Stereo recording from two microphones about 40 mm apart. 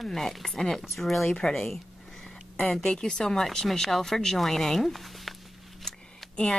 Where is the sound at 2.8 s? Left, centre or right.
Centre.